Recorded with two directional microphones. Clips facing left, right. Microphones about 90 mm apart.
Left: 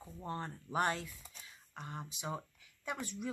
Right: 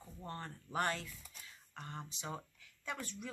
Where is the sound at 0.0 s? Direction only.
15° left (ahead or behind).